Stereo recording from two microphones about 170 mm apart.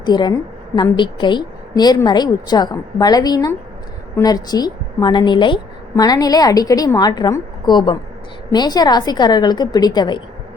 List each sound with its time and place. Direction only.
0.0 s a woman's voice: 25° left (ahead or behind)